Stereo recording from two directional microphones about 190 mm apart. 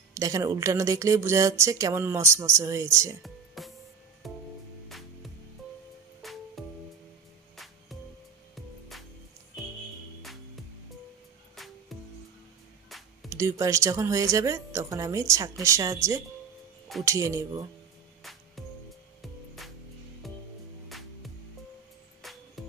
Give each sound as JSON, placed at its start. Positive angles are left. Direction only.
{"t": 0.1, "sound": "speech", "side_deg": -15}
{"t": 3.2, "sound": "music", "side_deg": 0}
{"t": 11.5, "sound": "music", "side_deg": 0}
{"t": 13.3, "sound": "speech", "side_deg": -15}
{"t": 19.2, "sound": "music", "side_deg": 0}
{"t": 22.2, "sound": "music", "side_deg": 0}